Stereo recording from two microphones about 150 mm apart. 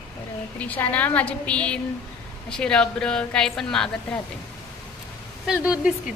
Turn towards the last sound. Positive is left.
turn(degrees=-5)  # may be behind; listen again after turning